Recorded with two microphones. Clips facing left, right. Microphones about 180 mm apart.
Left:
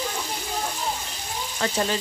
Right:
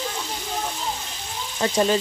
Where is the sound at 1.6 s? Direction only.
20° right (ahead or behind).